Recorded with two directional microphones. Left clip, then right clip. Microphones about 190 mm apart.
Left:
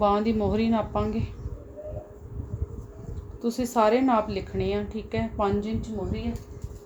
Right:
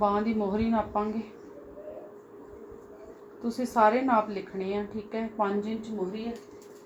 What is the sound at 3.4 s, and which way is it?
A woman's voice, 50° left (ahead or behind).